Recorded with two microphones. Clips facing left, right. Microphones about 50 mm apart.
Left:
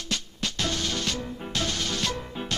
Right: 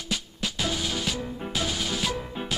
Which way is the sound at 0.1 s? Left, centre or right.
Centre.